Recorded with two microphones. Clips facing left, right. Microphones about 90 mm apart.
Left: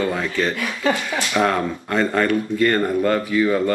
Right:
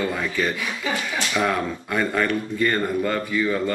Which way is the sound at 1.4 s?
Centre (ahead or behind).